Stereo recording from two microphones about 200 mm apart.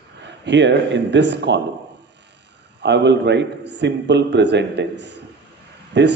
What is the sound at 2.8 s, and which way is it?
A man's voice, 60° right (ahead or behind).